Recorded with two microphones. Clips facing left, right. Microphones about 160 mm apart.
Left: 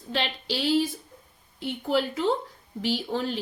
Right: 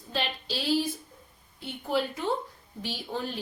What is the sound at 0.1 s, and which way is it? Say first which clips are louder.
A woman's voice: left 3 dB; 75° left (ahead or behind).